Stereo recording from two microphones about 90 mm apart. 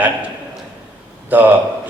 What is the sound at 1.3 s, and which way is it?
Speech, 20° right (ahead or behind).